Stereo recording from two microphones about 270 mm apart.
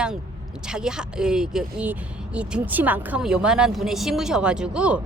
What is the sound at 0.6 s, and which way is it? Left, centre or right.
Speech, centre.